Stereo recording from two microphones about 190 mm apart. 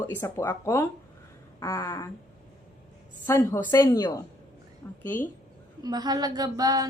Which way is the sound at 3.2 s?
15° left (ahead or behind).